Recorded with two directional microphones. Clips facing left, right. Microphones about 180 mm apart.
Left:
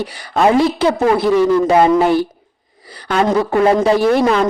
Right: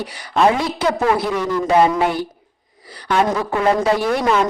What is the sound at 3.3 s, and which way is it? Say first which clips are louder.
Speech: left 5 dB; 25° left (ahead or behind).